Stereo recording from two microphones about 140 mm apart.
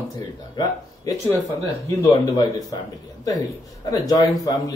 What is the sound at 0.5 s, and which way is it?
Speech, 25° left (ahead or behind).